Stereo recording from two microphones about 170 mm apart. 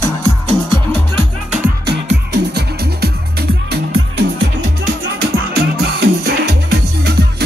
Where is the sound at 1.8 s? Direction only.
80° right.